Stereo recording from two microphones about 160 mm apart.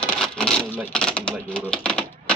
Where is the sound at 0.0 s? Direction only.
5° left (ahead or behind).